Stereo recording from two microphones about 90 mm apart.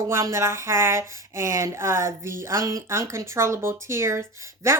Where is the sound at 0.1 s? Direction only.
30° right (ahead or behind).